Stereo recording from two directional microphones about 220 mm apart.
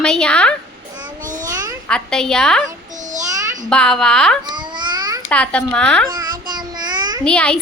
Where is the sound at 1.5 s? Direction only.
15° right (ahead or behind).